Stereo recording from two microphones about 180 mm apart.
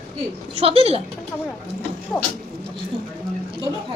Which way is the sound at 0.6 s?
35° right (ahead or behind).